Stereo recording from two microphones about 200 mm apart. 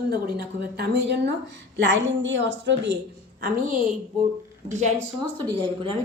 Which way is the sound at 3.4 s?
45° right (ahead or behind).